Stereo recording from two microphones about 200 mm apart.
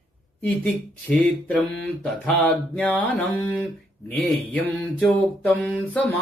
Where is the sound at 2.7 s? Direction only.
5° left (ahead or behind).